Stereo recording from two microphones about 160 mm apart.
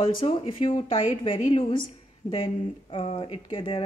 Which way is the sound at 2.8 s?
35° left (ahead or behind).